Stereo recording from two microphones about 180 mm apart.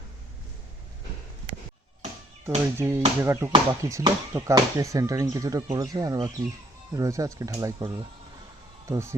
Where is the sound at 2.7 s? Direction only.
15° right (ahead or behind).